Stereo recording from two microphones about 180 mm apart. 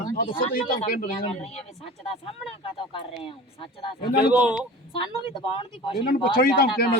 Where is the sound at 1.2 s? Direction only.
35° left (ahead or behind).